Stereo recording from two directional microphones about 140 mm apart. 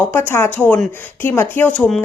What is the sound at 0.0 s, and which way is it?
Speech, 15° left (ahead or behind).